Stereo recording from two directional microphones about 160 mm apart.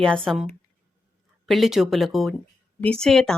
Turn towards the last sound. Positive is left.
turn(degrees=5)  # may be behind; listen again after turning